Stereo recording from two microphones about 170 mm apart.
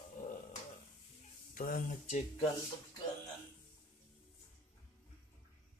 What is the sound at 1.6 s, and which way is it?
Speech, 50° left (ahead or behind).